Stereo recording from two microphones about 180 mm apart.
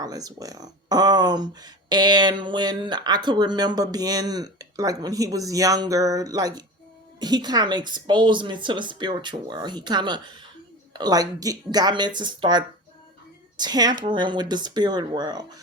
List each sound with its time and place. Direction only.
0.0 s speech: 20° right (ahead or behind)